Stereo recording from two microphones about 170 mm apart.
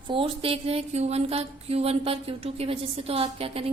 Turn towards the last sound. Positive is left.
turn(degrees=-35)  # may be behind; listen again after turning